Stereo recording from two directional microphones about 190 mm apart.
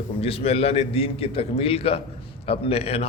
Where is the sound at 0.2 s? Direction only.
30° left (ahead or behind).